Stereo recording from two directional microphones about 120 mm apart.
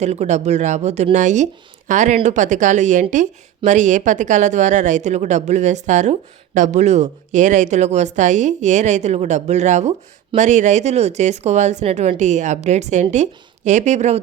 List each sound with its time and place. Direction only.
0.0 s speech: 70° right (ahead or behind)
1.1 s speech: 90° right
10.3 s speech: 90° right; by 14.2 s 75° right (ahead or behind)